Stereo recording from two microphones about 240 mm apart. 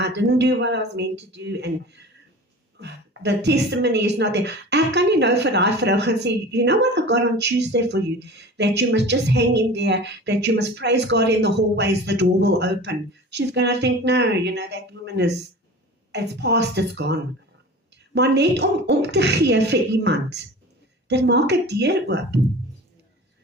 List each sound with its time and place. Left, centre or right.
0.0 s a woman's voice: right